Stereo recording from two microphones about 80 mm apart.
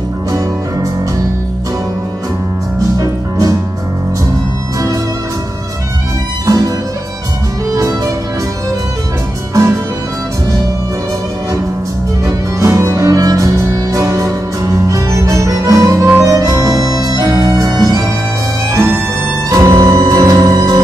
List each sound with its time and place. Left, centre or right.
3.0 s music: right
6.4 s music: right
7.7 s music: right
9.5 s music: right
12.5 s music: right
19.5 s music: right